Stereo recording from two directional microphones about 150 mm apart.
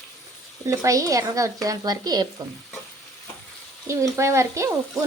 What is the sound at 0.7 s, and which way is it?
Speech, 20° right (ahead or behind).